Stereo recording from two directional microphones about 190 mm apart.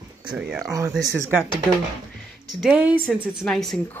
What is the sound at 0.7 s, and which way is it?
Speech, 15° right (ahead or behind).